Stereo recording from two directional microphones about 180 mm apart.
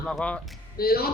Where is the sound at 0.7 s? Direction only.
60° left (ahead or behind).